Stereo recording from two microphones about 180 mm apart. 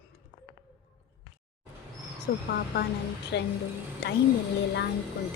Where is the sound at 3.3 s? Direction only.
65° left (ahead or behind).